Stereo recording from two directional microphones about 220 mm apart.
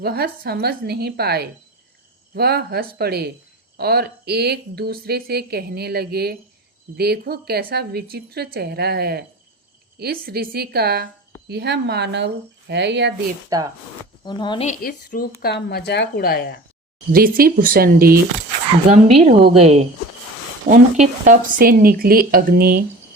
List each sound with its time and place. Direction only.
0.0 s speech: 45° right (ahead or behind)
13.5 s speech: 15° right (ahead or behind)
14.3 s speech: 20° left (ahead or behind)
14.7 s speech: 40° left (ahead or behind)
17.1 s speech: 40° right (ahead or behind)
18.9 s speech: 30° right (ahead or behind)